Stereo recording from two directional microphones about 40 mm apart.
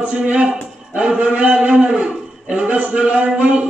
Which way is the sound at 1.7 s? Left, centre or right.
Right.